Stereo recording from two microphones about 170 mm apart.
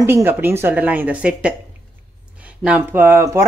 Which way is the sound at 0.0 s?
15° right (ahead or behind).